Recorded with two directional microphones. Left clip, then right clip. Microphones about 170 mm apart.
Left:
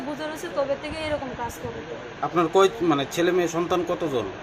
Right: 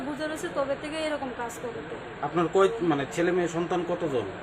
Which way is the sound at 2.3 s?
20° left (ahead or behind).